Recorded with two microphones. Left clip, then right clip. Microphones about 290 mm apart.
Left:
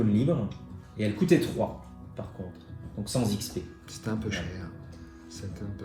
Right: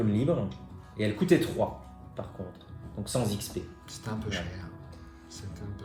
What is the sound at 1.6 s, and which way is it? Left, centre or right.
Speech, right.